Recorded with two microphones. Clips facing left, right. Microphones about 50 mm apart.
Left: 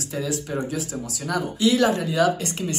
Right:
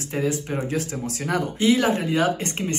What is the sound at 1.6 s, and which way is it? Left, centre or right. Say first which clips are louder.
Speech: left 1 dB; right.